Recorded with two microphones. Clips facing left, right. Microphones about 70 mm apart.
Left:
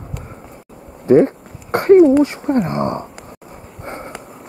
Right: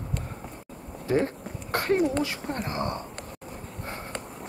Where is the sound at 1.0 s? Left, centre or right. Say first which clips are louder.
Left 14 dB; left.